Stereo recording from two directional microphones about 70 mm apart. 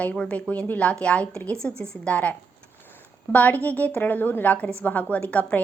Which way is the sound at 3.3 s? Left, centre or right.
Left.